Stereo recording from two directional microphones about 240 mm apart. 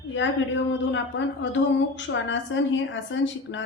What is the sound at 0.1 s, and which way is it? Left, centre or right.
A woman's voice, left.